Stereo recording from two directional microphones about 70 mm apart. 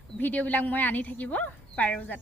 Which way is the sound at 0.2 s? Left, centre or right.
Left.